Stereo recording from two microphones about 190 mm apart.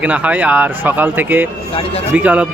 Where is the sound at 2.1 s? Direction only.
5° right (ahead or behind).